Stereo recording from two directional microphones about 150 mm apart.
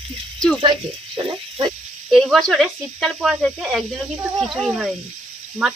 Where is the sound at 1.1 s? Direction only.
35° right (ahead or behind).